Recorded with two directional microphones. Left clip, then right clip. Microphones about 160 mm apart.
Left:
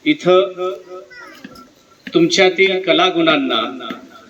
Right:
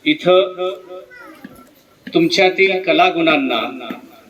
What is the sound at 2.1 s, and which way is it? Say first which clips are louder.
A man's voice: left 1 dB; 15° left (ahead or behind).